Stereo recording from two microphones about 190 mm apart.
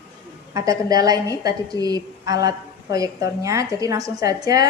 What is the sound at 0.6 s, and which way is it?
A woman's voice, 20° right (ahead or behind).